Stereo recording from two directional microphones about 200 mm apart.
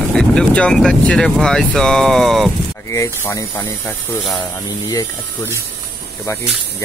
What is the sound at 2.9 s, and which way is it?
Speech, 10° left (ahead or behind).